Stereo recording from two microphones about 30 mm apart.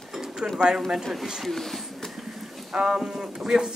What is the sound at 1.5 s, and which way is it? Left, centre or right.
Speech, centre.